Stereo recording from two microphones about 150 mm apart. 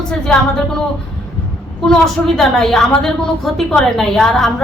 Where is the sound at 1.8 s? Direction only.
Centre (ahead or behind).